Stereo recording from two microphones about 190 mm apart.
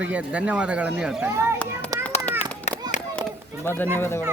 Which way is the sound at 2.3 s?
10° left (ahead or behind).